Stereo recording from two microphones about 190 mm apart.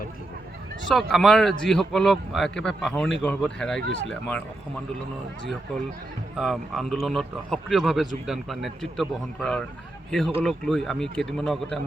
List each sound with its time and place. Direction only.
0.9 s a man's voice: centre (ahead or behind)
6.3 s a man's voice: centre (ahead or behind)